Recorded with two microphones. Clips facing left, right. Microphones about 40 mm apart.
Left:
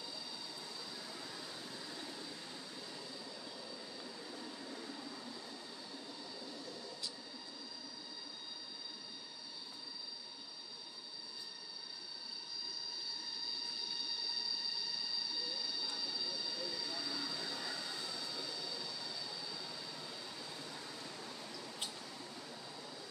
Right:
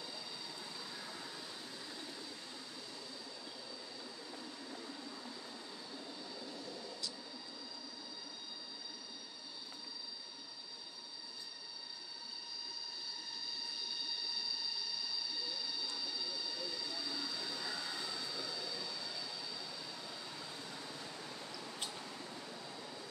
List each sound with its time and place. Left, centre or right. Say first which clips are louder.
0.9 s vehicle: right 1 dB; centre
17.3 s train: even; centre
19.7 s vehicle: even; centre